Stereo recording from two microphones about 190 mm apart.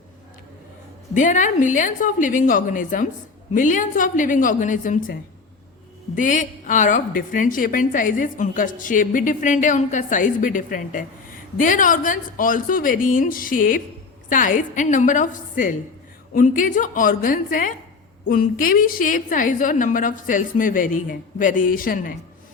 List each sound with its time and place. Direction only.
1.1 s a woman's voice: 40° left (ahead or behind)
6.1 s a woman's voice: 40° left (ahead or behind)